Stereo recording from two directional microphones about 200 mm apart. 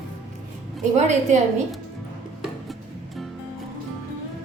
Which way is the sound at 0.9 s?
35° right (ahead or behind).